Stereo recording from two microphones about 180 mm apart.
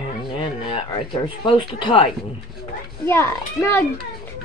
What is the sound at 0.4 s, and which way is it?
A child's voice, 30° left (ahead or behind).